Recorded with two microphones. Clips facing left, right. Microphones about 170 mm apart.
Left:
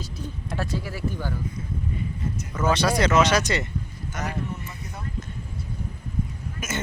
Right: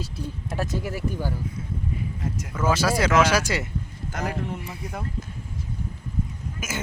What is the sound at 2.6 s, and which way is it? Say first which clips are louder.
Speech: left 1 dB; 5° right (ahead or behind).